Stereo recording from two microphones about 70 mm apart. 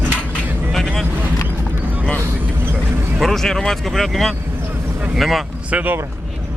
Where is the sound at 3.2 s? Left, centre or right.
Centre.